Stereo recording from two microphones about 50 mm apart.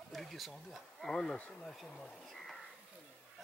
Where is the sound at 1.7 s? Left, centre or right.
Centre.